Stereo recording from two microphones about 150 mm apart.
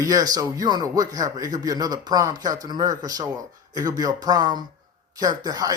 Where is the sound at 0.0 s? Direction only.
25° right (ahead or behind).